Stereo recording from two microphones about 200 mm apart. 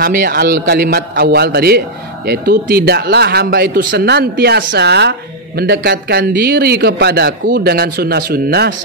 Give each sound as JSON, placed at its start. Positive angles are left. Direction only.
{"t": 0.0, "sound": "a man's voice", "side_deg": -45}